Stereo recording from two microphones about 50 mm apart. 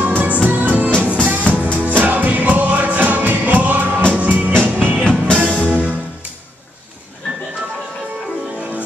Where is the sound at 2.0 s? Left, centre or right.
Right.